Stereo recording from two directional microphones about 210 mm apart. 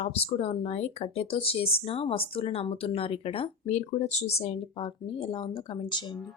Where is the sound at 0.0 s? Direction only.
30° left (ahead or behind).